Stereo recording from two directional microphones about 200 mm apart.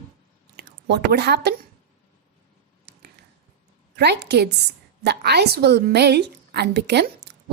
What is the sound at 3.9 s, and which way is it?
A woman's voice, 55° right (ahead or behind).